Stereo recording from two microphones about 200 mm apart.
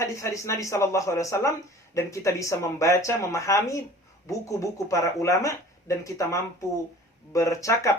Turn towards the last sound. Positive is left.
turn(degrees=15)  # may be behind; listen again after turning